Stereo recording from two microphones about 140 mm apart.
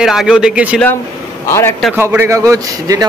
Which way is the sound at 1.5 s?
20° left (ahead or behind).